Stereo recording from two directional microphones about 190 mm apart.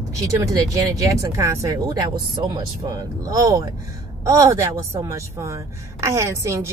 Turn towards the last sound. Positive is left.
turn(degrees=-15)  # may be behind; listen again after turning